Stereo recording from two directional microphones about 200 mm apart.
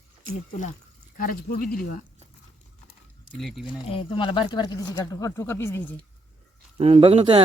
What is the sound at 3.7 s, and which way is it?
Speech, 25° left (ahead or behind).